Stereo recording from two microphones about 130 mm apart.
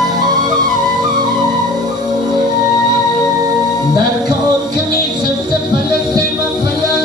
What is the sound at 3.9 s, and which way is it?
Music, 35° right (ahead or behind).